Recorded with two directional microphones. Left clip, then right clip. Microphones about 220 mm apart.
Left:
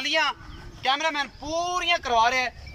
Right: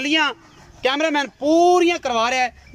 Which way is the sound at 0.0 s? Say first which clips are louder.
Right 5 dB; 55° right (ahead or behind).